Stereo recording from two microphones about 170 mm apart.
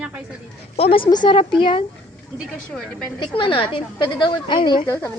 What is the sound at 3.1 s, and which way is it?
Speech, 30° left (ahead or behind).